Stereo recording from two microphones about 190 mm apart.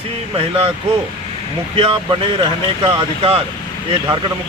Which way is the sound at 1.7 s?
30° right (ahead or behind).